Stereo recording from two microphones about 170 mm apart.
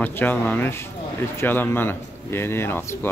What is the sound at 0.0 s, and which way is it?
A man's voice, 10° left (ahead or behind).